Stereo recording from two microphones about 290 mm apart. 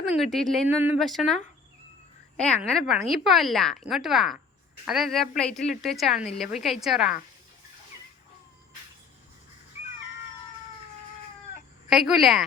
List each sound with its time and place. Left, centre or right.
0.1 s speech: centre
2.3 s speech: centre
11.9 s speech: centre